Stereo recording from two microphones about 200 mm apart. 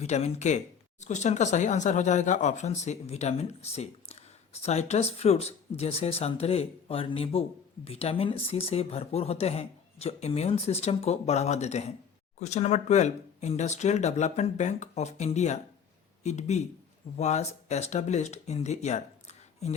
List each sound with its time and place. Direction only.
0.0 s speech: 35° left (ahead or behind)